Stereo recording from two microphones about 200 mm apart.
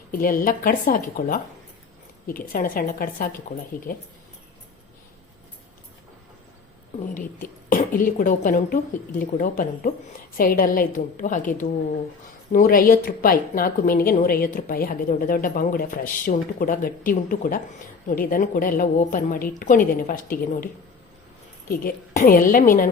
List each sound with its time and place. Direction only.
0.1 s a woman's voice: 45° left (ahead or behind)
7.1 s a woman's voice: 45° left (ahead or behind)
21.7 s a woman's voice: 45° left (ahead or behind)